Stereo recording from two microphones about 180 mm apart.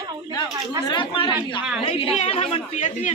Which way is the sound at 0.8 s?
25° left (ahead or behind).